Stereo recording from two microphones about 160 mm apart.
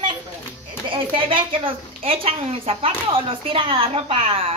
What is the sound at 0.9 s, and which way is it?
A woman's voice, 30° right (ahead or behind).